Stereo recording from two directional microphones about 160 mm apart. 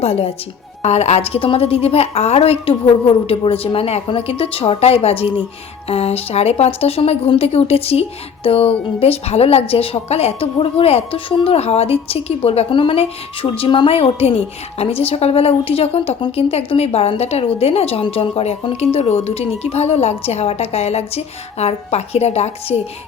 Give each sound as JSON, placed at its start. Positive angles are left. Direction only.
{"t": 0.0, "sound": "a woman's voice", "side_deg": 40}